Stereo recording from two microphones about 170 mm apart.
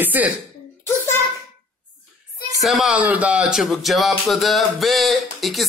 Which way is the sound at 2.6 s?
Centre (ahead or behind).